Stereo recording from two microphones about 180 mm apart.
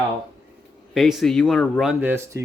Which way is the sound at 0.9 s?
Centre (ahead or behind).